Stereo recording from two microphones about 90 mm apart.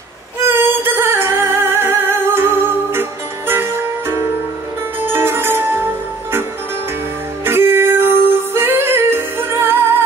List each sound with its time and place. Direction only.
0.4 s music: 25° right (ahead or behind)
7.4 s music: 25° right (ahead or behind)